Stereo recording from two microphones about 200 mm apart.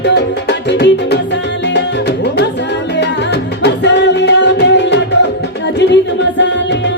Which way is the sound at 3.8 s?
60° left (ahead or behind).